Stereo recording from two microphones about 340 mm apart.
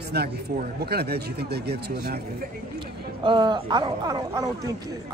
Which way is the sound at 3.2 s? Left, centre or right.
Centre.